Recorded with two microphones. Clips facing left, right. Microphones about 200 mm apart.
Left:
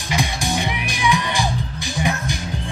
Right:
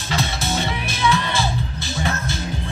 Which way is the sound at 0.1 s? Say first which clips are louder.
Left 1 dB; 15° left (ahead or behind).